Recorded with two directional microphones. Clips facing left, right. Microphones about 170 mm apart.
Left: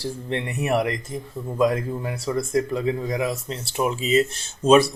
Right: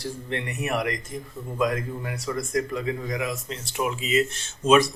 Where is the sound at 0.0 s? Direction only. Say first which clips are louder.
Left 3 dB; 30° left (ahead or behind).